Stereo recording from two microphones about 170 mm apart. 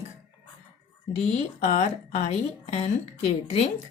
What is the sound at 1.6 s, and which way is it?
Speech, 45° left (ahead or behind).